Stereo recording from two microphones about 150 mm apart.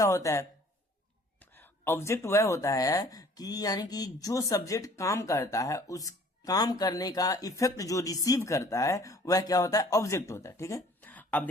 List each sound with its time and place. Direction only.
0.0 s speech: 20° left (ahead or behind)